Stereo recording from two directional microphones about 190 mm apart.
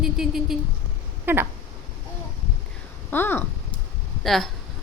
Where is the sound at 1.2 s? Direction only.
10° right (ahead or behind).